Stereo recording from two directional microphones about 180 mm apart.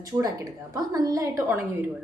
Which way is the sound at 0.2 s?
20° right (ahead or behind).